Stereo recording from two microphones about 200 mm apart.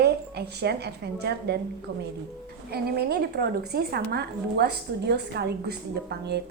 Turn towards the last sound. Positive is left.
turn(degrees=-55)  # may be behind; listen again after turning